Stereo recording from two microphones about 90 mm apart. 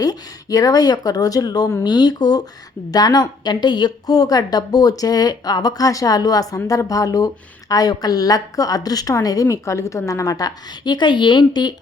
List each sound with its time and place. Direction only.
0.0 s a woman's voice: 45° left (ahead or behind)